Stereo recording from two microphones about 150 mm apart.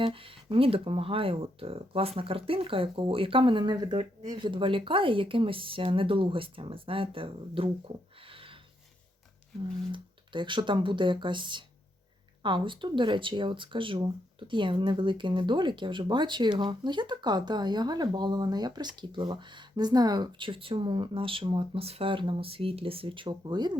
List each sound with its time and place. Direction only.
0.0 s speech: 35° right (ahead or behind)
8.3 s a sound: 35° right (ahead or behind)
9.9 s speech: 30° right (ahead or behind)